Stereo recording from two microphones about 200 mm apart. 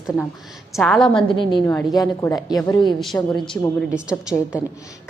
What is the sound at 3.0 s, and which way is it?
A woman's voice, centre (ahead or behind).